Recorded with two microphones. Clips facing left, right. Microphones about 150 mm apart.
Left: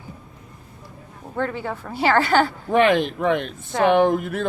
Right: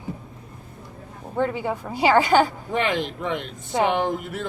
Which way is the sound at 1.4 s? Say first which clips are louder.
Right 2 dB; 15° right (ahead or behind).